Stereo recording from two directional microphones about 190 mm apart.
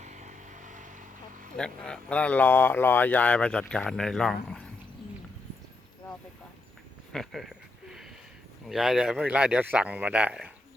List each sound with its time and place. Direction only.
0.0 s vehicle: 40° right (ahead or behind)
1.5 s speech: 5° left (ahead or behind)
7.1 s speech: centre (ahead or behind)
8.6 s speech: centre (ahead or behind)